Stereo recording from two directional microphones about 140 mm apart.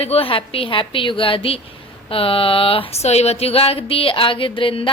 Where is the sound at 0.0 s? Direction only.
45° left (ahead or behind).